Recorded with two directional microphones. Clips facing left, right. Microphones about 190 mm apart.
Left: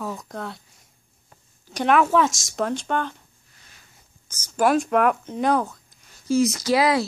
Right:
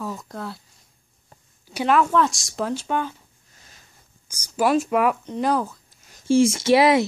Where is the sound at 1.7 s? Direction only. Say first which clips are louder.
Even; 10° right (ahead or behind).